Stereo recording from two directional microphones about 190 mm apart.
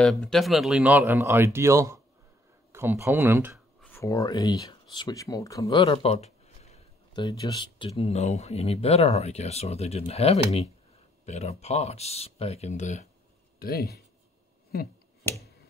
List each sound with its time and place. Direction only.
0.0 s speech: centre (ahead or behind)
3.8 s speech: 15° left (ahead or behind); by 7.2 s 35° left (ahead or behind)
7.2 s speech: 20° left (ahead or behind); by 13.1 s 40° left (ahead or behind)
13.6 s speech: 55° left (ahead or behind)